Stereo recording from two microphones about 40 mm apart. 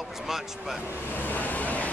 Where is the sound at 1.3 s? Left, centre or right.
Left.